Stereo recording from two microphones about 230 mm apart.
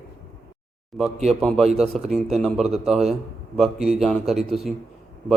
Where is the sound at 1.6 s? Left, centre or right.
Right.